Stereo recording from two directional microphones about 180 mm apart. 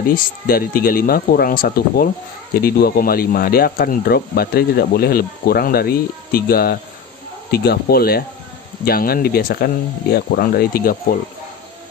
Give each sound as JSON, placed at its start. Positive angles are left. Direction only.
{"t": 0.1, "sound": "speech", "side_deg": 55}